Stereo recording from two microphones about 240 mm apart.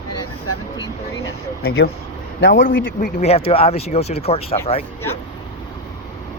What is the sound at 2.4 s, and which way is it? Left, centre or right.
Speech, left.